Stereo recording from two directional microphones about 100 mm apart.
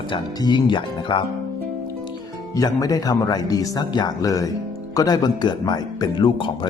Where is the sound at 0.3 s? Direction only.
45° left (ahead or behind).